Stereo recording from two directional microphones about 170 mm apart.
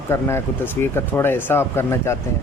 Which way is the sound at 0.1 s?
15° left (ahead or behind).